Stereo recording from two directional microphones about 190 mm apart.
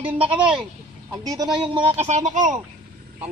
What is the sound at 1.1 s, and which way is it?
Speech, 20° right (ahead or behind).